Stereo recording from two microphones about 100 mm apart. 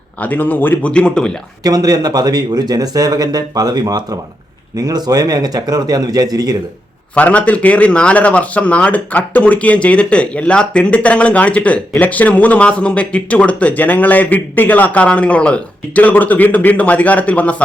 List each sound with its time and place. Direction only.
0.2 s speech: 15° left (ahead or behind)
1.6 s speech: 40° right (ahead or behind)
7.2 s speech: 15° left (ahead or behind)